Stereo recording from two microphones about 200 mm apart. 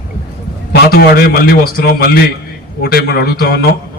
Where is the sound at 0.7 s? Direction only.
50° left (ahead or behind).